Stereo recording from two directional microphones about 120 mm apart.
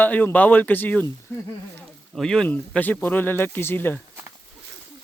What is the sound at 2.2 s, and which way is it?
A man's voice, 5° left (ahead or behind).